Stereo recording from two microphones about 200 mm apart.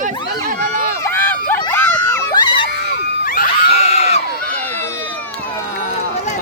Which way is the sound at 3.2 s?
45° left (ahead or behind).